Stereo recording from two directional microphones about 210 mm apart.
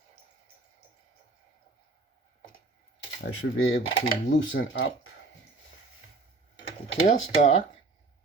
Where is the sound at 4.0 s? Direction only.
60° left (ahead or behind).